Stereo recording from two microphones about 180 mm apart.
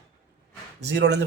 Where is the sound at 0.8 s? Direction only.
70° right (ahead or behind).